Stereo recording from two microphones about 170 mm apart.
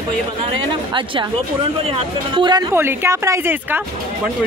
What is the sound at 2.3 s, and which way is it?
Speech, 25° right (ahead or behind).